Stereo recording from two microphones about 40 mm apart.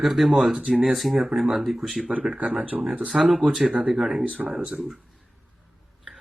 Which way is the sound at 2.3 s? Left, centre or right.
Right.